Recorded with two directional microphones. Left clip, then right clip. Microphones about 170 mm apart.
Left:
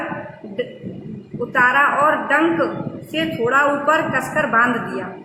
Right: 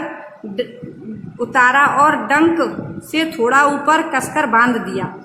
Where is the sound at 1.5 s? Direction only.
55° right (ahead or behind).